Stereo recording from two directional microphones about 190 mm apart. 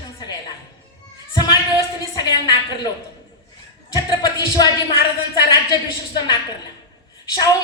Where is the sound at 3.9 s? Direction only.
20° left (ahead or behind).